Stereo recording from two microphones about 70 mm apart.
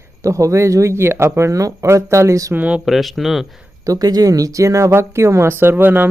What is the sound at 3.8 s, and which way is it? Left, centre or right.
Speech, right.